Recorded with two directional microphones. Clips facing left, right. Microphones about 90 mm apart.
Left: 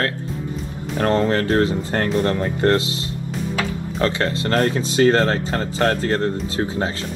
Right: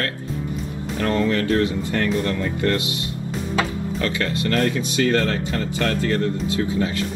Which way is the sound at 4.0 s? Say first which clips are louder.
Left 4 dB; 35° left (ahead or behind).